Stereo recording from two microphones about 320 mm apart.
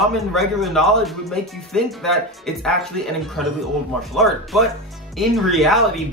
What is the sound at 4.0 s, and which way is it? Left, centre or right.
Speech, centre.